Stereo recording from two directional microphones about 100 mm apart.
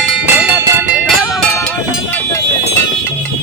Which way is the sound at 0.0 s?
10° right (ahead or behind).